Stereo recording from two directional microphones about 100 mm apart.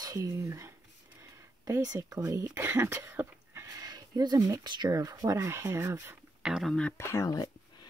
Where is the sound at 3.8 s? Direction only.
40° right (ahead or behind); by 5.9 s 25° right (ahead or behind).